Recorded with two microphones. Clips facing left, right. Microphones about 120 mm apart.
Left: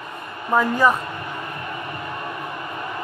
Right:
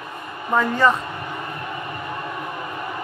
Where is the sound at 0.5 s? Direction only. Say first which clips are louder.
Even; 10° left (ahead or behind).